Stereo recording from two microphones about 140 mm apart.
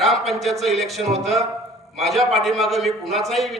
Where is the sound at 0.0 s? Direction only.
Centre (ahead or behind).